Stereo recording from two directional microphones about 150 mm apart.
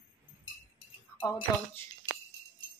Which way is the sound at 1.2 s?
25° left (ahead or behind).